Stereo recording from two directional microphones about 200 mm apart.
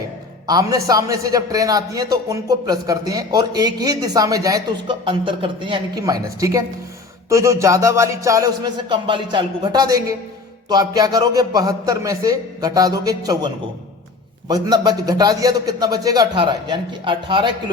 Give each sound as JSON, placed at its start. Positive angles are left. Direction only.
{"t": 0.4, "sound": "a man's voice", "side_deg": -20}